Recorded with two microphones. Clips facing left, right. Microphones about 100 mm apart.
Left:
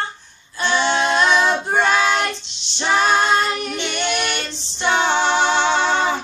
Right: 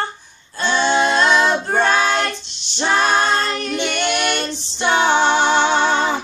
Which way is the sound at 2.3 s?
45° right (ahead or behind).